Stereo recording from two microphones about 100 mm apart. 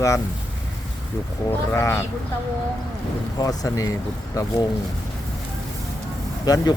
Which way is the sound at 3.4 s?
35° left (ahead or behind).